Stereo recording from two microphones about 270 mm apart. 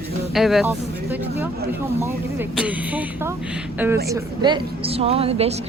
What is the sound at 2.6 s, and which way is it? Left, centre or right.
Speech, centre.